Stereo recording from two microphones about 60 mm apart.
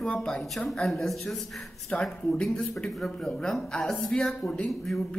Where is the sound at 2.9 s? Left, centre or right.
Centre.